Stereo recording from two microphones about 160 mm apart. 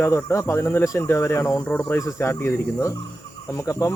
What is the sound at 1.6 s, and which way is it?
Speech, 5° left (ahead or behind).